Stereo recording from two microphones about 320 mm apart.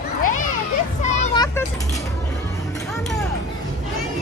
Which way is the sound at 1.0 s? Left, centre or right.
Centre.